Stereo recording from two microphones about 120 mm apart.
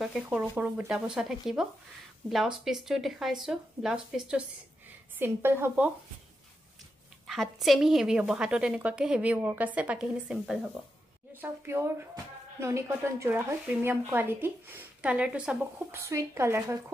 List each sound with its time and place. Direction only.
0.0 s speech: 5° right (ahead or behind)
5.2 s a woman's voice: 20° right (ahead or behind)
7.2 s a woman's voice: centre (ahead or behind)
11.4 s a woman's voice: 20° right (ahead or behind)
15.9 s a woman's voice: 25° right (ahead or behind)